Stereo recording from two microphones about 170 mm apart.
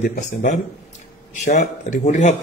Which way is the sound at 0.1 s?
45° left (ahead or behind).